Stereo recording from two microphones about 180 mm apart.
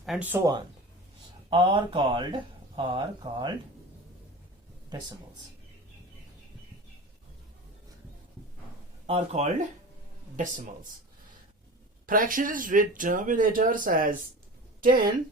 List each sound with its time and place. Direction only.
0.0 s speech: 5° right (ahead or behind)
1.5 s speech: 30° right (ahead or behind)
9.0 s speech: 35° right (ahead or behind)
12.0 s speech: 50° right (ahead or behind)